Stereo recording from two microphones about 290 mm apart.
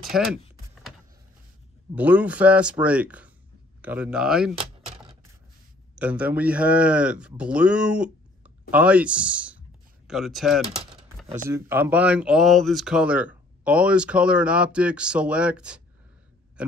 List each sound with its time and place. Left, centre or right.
0.1 s speech: centre
2.0 s speech: centre
4.6 s keys jangling: centre
5.9 s speech: centre